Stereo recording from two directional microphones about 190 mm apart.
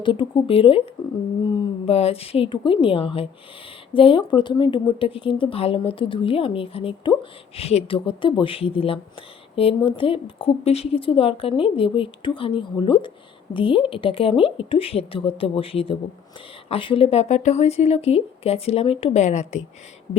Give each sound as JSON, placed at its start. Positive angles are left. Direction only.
{"t": 0.0, "sound": "speech", "side_deg": 25}